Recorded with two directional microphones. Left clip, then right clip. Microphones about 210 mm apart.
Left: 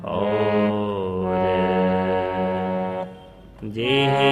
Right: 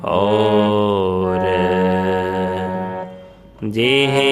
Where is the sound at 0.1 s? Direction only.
45° right (ahead or behind).